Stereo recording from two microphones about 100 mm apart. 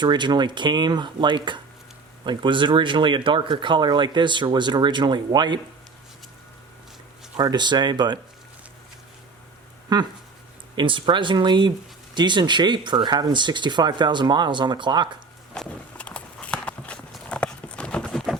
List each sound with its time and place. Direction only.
0.0 s speech: 50° right (ahead or behind)
7.3 s speech: 45° right (ahead or behind)
9.9 s speech: 45° right (ahead or behind)
15.5 s walk: 10° left (ahead or behind)